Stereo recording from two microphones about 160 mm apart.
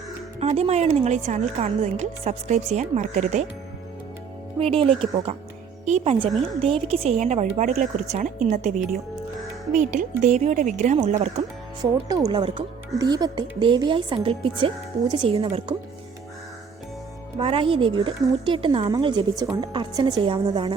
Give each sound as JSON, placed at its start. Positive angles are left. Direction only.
{"t": 0.3, "sound": "a woman's voice", "side_deg": -40}
{"t": 4.6, "sound": "a woman's voice", "side_deg": -35}
{"t": 6.6, "sound": "a woman's voice", "side_deg": -35}
{"t": 8.7, "sound": "speech", "side_deg": 0}
{"t": 9.7, "sound": "a woman's voice", "side_deg": -50}
{"t": 11.8, "sound": "a woman's voice", "side_deg": -20}
{"t": 17.3, "sound": "a woman's voice", "side_deg": -35}